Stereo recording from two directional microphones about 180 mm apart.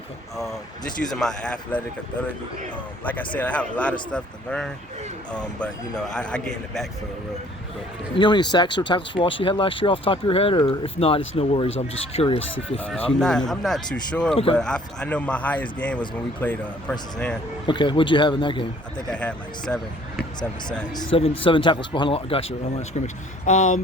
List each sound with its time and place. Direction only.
1.1 s a man's voice: 5° left (ahead or behind)
3.1 s a man's voice: 10° left (ahead or behind)
8.1 s speech: 25° left (ahead or behind)
12.4 s speech: 90° left
12.7 s a man's voice: 10° left (ahead or behind)
17.7 s speech: 25° left (ahead or behind)
19.1 s a man's voice: 5° left (ahead or behind)
20.9 s speech: 30° left (ahead or behind)